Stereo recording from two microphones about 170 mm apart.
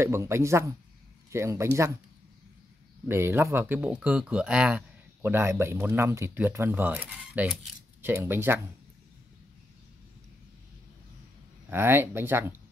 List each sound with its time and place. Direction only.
0.0 s speech: 15° right (ahead or behind)
3.1 s speech: 15° right (ahead or behind)
11.7 s speech: 15° right (ahead or behind)